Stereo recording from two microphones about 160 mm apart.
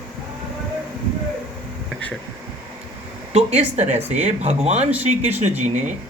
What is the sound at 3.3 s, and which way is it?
Speech, 40° right (ahead or behind).